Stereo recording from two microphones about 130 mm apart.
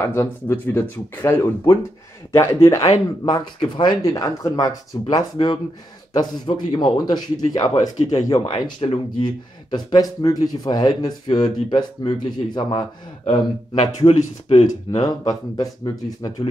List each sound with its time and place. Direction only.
0.0 s speech: 20° left (ahead or behind)
2.8 s speech: 55° left (ahead or behind)
3.5 s speech: 35° left (ahead or behind)
13.2 s speech: 55° left (ahead or behind)
15.0 s speech: 30° left (ahead or behind)